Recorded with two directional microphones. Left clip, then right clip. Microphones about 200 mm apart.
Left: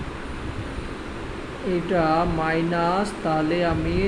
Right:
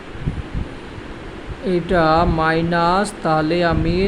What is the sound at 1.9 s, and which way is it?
Speech, 40° right (ahead or behind).